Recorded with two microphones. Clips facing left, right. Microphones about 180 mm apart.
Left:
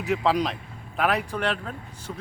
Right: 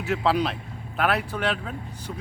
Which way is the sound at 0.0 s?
Centre (ahead or behind).